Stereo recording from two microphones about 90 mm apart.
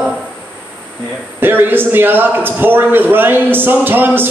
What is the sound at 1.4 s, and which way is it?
A man's voice, 25° right (ahead or behind).